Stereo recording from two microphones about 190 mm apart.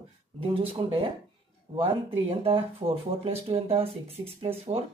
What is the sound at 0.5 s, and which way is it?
Speech, 30° right (ahead or behind).